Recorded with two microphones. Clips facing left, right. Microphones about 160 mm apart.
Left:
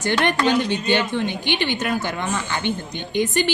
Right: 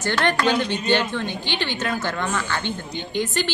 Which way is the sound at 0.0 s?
15° left (ahead or behind).